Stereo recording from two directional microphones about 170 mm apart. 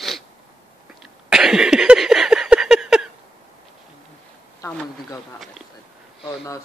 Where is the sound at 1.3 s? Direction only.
5° right (ahead or behind).